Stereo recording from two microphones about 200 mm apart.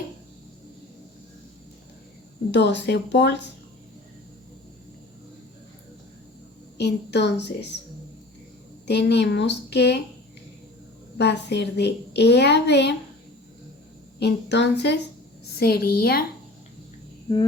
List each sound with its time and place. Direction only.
2.5 s a child's voice: 60° left (ahead or behind)
6.7 s a child's voice: 60° left (ahead or behind)
8.9 s a child's voice: 60° left (ahead or behind)
11.2 s a child's voice: 55° left (ahead or behind)
14.2 s a child's voice: 60° left (ahead or behind)